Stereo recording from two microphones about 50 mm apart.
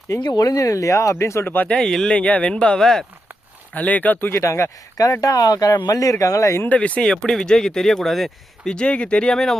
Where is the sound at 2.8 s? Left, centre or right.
Centre.